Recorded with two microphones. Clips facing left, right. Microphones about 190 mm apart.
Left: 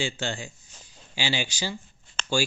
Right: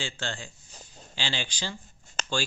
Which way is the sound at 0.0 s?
10° left (ahead or behind).